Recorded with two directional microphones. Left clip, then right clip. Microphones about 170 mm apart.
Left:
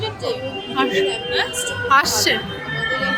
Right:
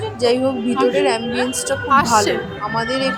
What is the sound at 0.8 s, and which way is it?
A woman's voice, 10° right (ahead or behind).